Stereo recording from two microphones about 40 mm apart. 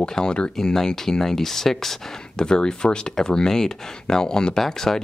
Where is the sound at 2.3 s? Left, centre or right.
Centre.